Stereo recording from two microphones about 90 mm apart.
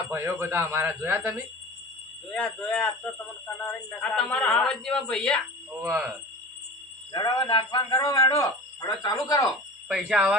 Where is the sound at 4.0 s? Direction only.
10° left (ahead or behind).